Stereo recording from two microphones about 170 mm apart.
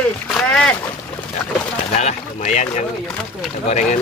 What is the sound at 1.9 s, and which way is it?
A man's voice, 40° left (ahead or behind).